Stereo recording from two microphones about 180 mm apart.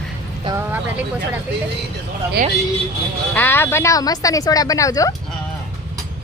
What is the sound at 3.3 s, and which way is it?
A woman's voice, 10° left (ahead or behind).